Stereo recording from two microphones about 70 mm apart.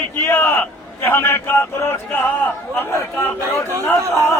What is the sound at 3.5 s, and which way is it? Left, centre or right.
Speech, right.